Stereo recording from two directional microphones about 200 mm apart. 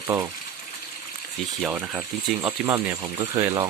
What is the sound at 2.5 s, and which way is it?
Speech, 15° right (ahead or behind).